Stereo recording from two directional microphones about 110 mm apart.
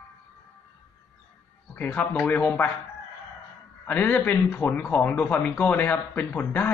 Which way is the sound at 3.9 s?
15° left (ahead or behind).